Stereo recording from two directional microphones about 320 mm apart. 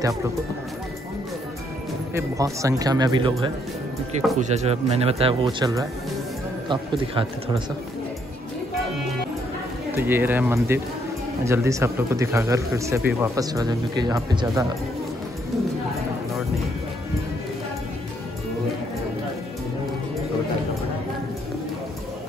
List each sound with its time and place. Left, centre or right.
2.1 s speech: centre
9.9 s speech: centre